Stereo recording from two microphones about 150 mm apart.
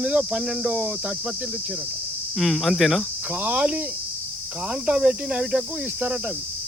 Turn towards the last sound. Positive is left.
turn(degrees=-5)  # may be behind; listen again after turning